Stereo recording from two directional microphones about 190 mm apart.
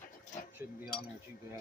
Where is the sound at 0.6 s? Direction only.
15° right (ahead or behind).